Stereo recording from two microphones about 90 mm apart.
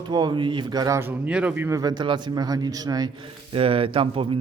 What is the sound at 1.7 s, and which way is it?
Speech, 40° right (ahead or behind).